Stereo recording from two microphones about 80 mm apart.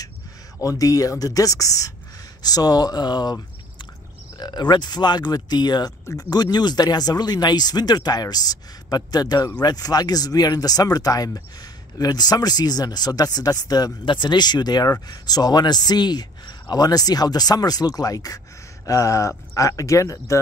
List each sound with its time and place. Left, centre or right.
0.6 s speech: left
4.4 s speech: left